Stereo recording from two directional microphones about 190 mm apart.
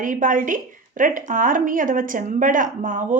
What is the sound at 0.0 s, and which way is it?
A woman's voice, 45° right (ahead or behind).